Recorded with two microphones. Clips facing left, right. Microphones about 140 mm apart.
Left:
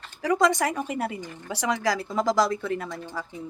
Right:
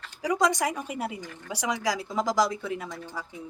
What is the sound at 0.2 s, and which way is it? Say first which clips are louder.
Speech: left 3 dB; 15° right (ahead or behind).